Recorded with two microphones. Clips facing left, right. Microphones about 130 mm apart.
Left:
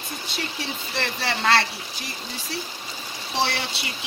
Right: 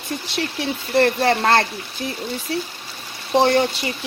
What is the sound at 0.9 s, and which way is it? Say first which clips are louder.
Speech: right 12 dB; 50° right (ahead or behind).